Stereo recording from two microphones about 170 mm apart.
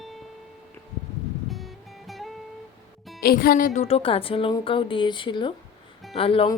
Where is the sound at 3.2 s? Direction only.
60° left (ahead or behind); by 6.5 s 35° left (ahead or behind).